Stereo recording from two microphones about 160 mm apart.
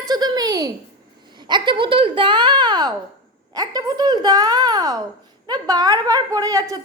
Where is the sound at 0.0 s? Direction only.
25° right (ahead or behind).